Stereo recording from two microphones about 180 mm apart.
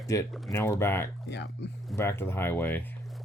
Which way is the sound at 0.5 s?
15° left (ahead or behind).